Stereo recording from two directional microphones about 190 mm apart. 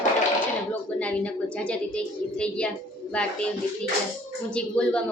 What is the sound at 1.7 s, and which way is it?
Speech, 5° left (ahead or behind).